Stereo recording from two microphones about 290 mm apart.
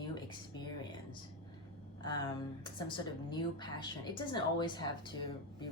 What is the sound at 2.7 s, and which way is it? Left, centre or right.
A woman's voice, centre.